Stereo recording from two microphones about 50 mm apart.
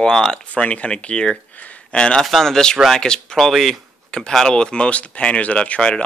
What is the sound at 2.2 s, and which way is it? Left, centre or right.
Speech, centre.